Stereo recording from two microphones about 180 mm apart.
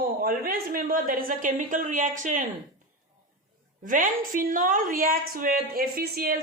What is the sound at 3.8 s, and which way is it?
A woman's voice, 50° right (ahead or behind).